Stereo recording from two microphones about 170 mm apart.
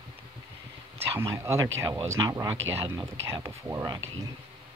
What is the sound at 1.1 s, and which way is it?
Speech, 15° right (ahead or behind).